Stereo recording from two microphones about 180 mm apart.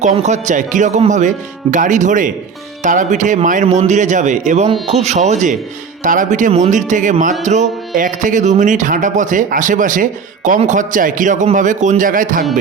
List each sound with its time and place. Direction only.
0.0 s speech: 40° right (ahead or behind)